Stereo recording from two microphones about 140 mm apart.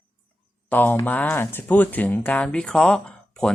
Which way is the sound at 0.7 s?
15° left (ahead or behind).